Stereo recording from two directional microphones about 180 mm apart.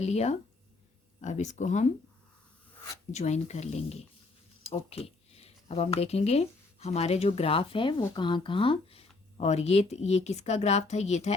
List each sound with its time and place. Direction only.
0.0 s speech: 40° left (ahead or behind)
3.1 s speech: 40° left (ahead or behind)